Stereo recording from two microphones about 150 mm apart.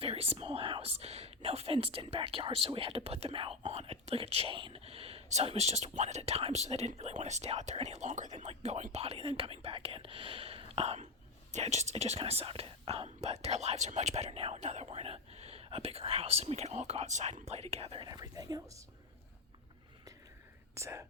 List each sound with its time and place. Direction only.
0.0 s speech: 40° right (ahead or behind)
18.1 s speech: 25° right (ahead or behind)
20.7 s speech: 20° right (ahead or behind)